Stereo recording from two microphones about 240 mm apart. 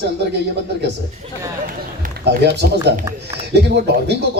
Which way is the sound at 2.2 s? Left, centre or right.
Right.